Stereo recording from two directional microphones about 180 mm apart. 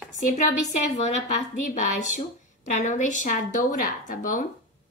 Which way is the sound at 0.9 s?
40° left (ahead or behind).